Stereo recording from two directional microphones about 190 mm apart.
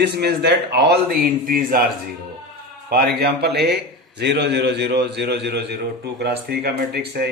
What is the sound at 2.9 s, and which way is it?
Speech, 55° right (ahead or behind).